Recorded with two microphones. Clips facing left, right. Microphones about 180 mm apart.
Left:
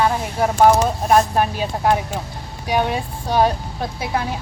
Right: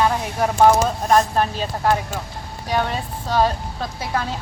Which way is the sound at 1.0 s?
10° left (ahead or behind).